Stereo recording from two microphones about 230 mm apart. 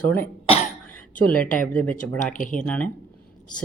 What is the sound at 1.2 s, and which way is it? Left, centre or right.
Speech, centre.